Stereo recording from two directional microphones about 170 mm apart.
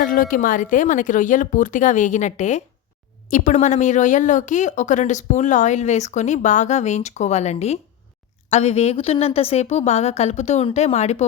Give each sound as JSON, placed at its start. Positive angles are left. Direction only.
{"t": 0.0, "sound": "a woman's voice", "side_deg": 50}